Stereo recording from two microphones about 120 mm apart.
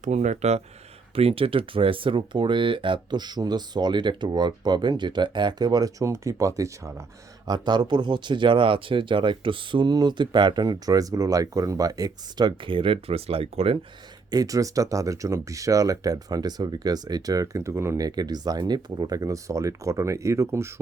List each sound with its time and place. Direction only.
0.0 s speech: 75° right (ahead or behind)
1.1 s speech: 55° right (ahead or behind); by 7.0 s 25° right (ahead or behind)
7.4 s speech: 35° right (ahead or behind); by 13.7 s 55° right (ahead or behind)
14.3 s speech: 30° right (ahead or behind)